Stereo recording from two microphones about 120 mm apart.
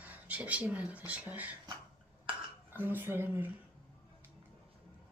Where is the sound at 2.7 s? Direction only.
15° right (ahead or behind).